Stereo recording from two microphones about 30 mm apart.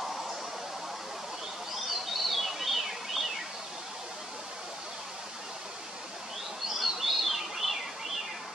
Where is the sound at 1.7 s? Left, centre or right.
Centre.